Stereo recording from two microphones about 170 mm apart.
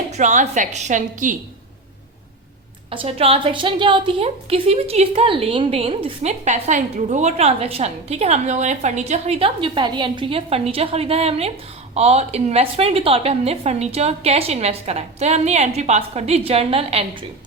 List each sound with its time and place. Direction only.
0.1 s a woman's voice: 45° right (ahead or behind)
2.9 s a woman's voice: 35° right (ahead or behind)